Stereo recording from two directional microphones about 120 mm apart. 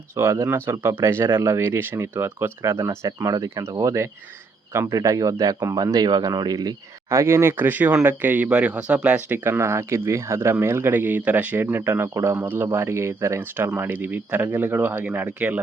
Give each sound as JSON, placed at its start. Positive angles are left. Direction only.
{"t": 0.2, "sound": "speech", "side_deg": -25}